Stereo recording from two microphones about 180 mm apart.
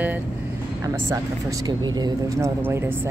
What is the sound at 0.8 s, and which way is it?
Speech, 20° right (ahead or behind).